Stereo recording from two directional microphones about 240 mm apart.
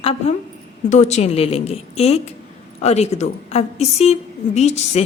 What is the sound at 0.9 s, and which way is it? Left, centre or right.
A woman's voice, left.